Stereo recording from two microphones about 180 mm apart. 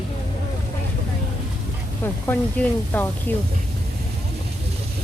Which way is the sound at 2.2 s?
10° left (ahead or behind).